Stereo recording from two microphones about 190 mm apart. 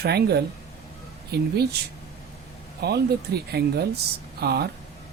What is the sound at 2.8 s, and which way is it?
Speech, 55° right (ahead or behind).